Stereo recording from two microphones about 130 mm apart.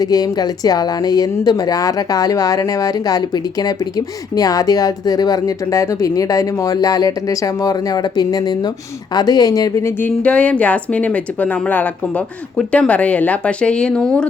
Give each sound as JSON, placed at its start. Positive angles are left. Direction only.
{"t": 0.0, "sound": "speech", "side_deg": 30}
{"t": 10.2, "sound": "speech", "side_deg": 10}